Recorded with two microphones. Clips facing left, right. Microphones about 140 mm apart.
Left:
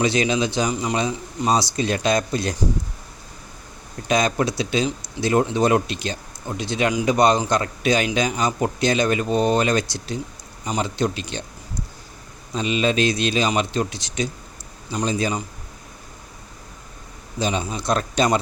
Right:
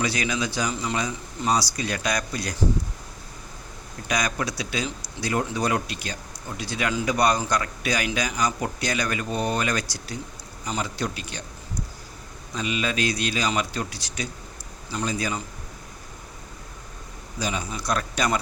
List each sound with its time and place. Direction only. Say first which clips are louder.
0.0 s a man's voice: left 6 dB; 25° left (ahead or behind)
4.1 s a man's voice: left 7 dB; 25° left (ahead or behind)
12.5 s a man's voice: left 6 dB; 25° left (ahead or behind)
17.4 s a man's voice: left 5 dB; 25° left (ahead or behind)